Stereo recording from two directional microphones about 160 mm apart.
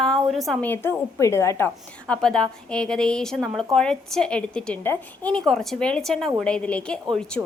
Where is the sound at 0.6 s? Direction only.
15° left (ahead or behind).